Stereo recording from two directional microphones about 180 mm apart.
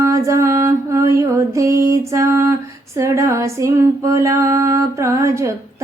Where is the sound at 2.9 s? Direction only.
15° right (ahead or behind).